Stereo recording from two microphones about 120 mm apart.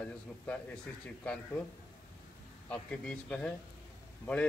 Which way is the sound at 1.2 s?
10° left (ahead or behind).